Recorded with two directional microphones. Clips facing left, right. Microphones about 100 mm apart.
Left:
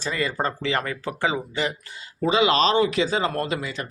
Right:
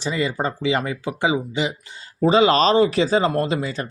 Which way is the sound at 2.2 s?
35° right (ahead or behind).